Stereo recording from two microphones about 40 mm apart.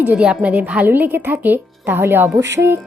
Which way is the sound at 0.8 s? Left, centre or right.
Right.